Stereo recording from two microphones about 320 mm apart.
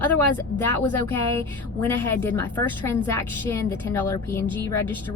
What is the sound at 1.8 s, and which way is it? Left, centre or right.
Speech, centre.